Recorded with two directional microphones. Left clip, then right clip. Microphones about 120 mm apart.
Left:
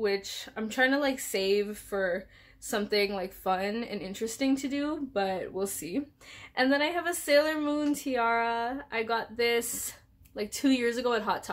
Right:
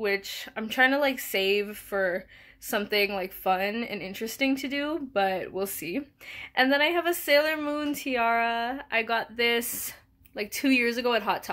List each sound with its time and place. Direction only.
0.0 s a woman's voice: 35° right (ahead or behind)